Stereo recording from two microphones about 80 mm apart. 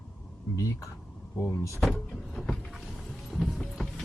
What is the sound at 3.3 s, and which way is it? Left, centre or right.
Vehicle, centre.